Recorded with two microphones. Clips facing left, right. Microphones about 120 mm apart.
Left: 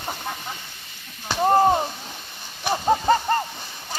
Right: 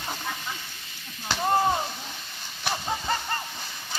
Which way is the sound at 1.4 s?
40° left (ahead or behind).